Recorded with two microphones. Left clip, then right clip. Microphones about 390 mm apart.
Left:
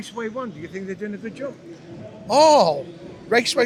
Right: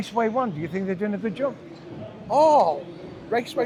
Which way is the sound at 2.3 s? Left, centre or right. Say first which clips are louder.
Left 3 dB; left.